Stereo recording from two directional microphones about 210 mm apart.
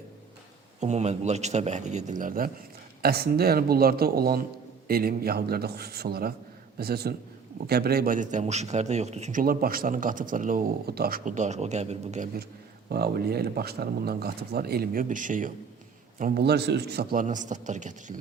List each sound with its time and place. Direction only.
0.8 s speech: 30° right (ahead or behind)
12.9 s speech: 50° right (ahead or behind)